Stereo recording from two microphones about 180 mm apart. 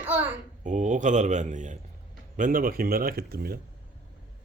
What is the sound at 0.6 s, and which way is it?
A man's voice, 45° right (ahead or behind).